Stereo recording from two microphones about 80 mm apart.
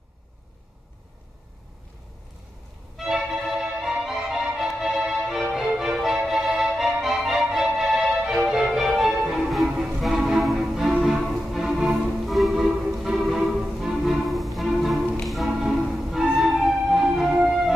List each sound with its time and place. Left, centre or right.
3.0 s music: centre